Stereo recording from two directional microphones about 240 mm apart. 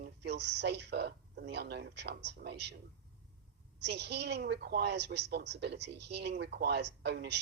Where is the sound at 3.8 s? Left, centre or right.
Right.